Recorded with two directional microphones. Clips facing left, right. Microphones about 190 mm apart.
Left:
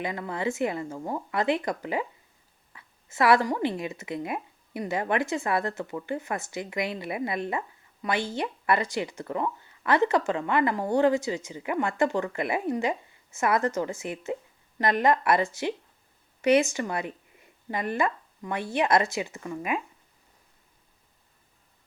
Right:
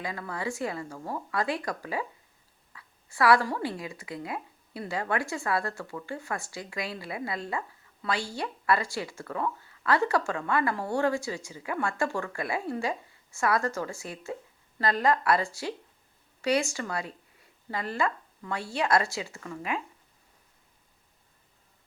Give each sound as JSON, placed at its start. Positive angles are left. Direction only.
{"t": 0.0, "sound": "speech", "side_deg": 20}